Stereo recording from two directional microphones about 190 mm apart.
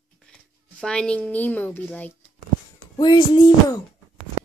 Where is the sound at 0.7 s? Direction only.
5° left (ahead or behind).